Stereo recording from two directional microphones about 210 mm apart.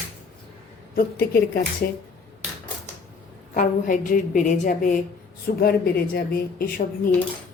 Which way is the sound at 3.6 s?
40° left (ahead or behind).